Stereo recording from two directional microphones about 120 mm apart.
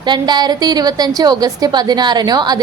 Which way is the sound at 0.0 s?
35° right (ahead or behind).